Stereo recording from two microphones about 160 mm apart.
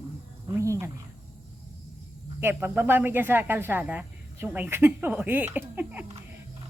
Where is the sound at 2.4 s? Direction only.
15° right (ahead or behind).